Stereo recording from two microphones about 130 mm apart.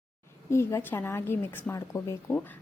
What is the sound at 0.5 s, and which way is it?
A woman's voice, 20° left (ahead or behind).